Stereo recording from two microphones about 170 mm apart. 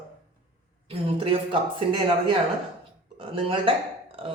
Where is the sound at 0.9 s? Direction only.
35° right (ahead or behind).